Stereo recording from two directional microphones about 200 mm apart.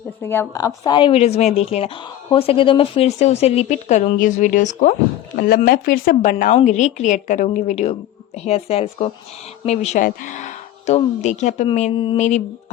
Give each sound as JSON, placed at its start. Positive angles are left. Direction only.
{"t": 0.2, "sound": "a woman's voice", "side_deg": 10}